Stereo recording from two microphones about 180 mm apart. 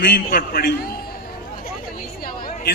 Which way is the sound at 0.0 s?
55° left (ahead or behind).